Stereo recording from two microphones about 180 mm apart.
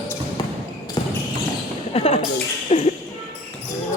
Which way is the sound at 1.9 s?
35° left (ahead or behind).